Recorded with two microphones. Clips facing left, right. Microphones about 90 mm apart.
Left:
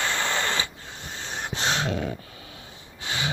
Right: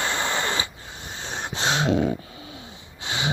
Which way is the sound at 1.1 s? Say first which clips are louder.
Right 1 dB; 20° right (ahead or behind).